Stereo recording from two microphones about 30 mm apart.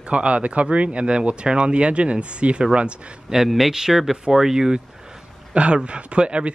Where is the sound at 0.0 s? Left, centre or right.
Right.